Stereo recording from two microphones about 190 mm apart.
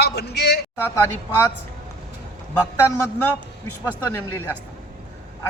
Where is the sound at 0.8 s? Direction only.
15° left (ahead or behind).